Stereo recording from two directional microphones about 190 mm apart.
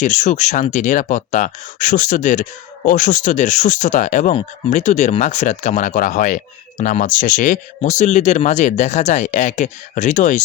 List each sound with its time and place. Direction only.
0.0 s speech: 40° left (ahead or behind)